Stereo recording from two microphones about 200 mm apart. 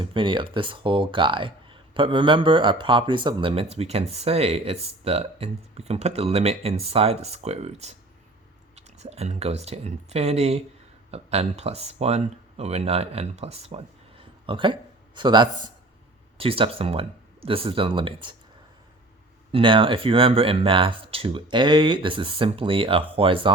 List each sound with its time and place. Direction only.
0.0 s speech: 25° right (ahead or behind)
19.5 s speech: 25° right (ahead or behind)